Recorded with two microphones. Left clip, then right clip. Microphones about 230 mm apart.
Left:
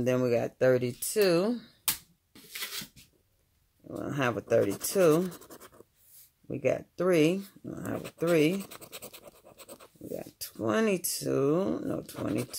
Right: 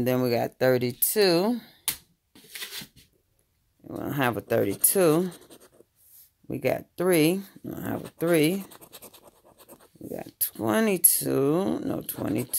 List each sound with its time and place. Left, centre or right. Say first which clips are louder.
0.0 s speech: right 2 dB; right
3.8 s speech: right 4 dB; right
5.5 s writing: left 2 dB; centre
6.4 s speech: right 2 dB; right
8.6 s scratch: left 2 dB; centre
10.1 s speech: right 3 dB; right